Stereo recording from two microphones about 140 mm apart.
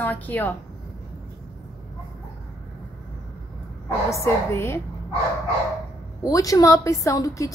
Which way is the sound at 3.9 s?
20° left (ahead or behind).